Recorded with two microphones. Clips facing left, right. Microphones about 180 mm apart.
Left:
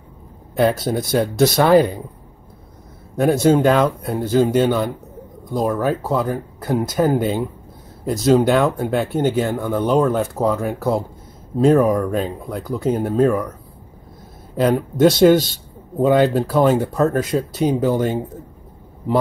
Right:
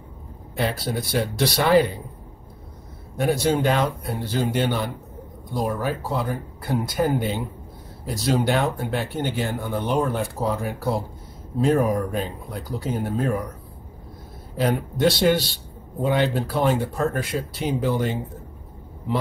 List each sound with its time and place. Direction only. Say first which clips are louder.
0.6 s a man's voice: left 8 dB; 45° left (ahead or behind)
3.2 s a man's voice: left 7 dB; 45° left (ahead or behind)
14.6 s a man's voice: left 6 dB; 45° left (ahead or behind)